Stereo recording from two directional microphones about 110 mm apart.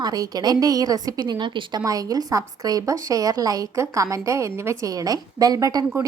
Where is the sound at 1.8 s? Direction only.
30° right (ahead or behind).